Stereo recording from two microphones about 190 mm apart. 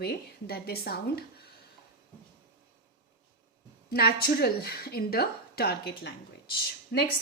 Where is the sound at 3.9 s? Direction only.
55° left (ahead or behind).